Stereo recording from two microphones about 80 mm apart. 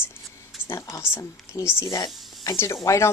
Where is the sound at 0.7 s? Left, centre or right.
Left.